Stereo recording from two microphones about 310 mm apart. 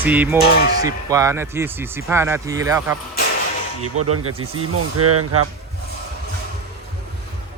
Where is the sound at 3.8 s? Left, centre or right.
Right.